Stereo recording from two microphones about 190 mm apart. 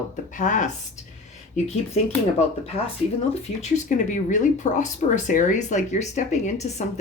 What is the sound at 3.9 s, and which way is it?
Speech, 40° left (ahead or behind).